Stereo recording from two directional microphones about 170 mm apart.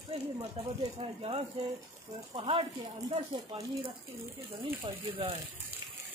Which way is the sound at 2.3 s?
35° right (ahead or behind).